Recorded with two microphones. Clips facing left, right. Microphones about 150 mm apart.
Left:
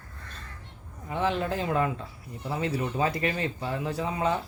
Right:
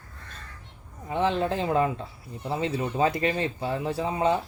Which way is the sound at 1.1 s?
25° right (ahead or behind).